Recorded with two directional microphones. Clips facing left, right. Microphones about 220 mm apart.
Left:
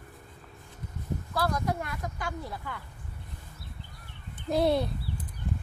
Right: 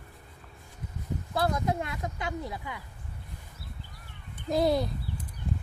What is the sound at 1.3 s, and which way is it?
Speech, 25° right (ahead or behind).